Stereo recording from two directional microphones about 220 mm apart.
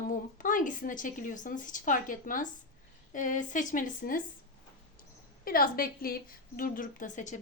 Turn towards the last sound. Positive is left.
turn(degrees=35)  # may be behind; listen again after turning